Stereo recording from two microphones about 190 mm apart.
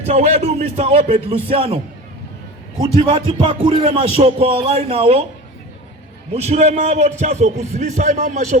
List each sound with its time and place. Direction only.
0.0 s a man's voice: 35° right (ahead or behind)
2.8 s music: 25° right (ahead or behind)
6.3 s a man's voice: 35° right (ahead or behind)